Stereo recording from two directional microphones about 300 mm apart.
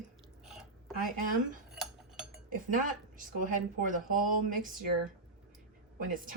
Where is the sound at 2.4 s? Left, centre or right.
Right.